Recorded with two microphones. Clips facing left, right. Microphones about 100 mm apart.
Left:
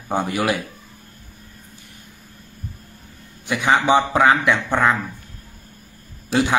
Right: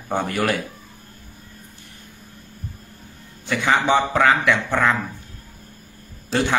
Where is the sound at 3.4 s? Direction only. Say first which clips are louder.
Left 2 dB; 15° left (ahead or behind).